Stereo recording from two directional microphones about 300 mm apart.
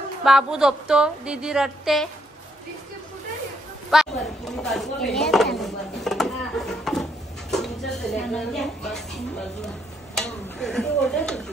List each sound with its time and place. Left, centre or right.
0.2 s a woman's voice: centre
3.9 s a woman's voice: centre